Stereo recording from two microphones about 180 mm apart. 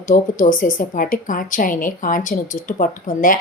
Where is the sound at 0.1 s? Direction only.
50° left (ahead or behind).